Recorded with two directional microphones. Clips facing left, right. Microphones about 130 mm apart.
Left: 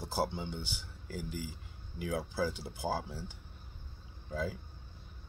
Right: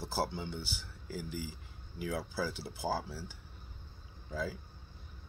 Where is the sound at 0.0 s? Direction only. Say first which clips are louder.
Left 1 dB; 15° left (ahead or behind).